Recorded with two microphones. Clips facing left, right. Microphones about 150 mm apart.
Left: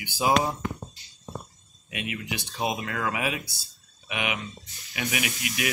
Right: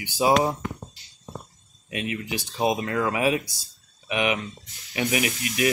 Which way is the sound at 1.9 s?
35° right (ahead or behind).